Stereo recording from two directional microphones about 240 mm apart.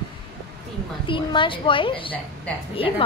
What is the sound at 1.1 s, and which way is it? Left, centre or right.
A woman's voice, left.